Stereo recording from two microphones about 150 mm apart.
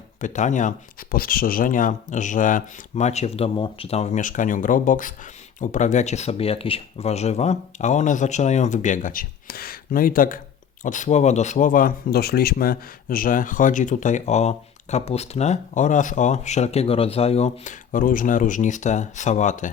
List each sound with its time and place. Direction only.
0.2 s speech: 55° left (ahead or behind)
10.8 s speech: 55° left (ahead or behind)